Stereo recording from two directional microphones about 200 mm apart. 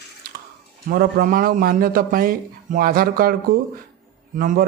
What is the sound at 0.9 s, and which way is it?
A man's voice, 45° right (ahead or behind).